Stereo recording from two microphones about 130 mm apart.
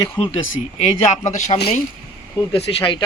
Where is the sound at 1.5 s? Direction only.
40° left (ahead or behind).